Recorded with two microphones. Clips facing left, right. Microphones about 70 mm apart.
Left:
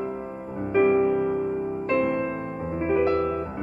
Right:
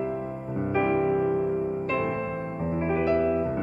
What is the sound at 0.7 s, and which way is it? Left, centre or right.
Music, centre.